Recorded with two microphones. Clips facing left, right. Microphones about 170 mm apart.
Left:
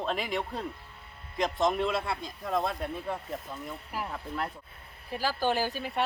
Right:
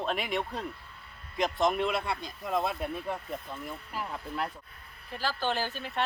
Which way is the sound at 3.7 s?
10° left (ahead or behind).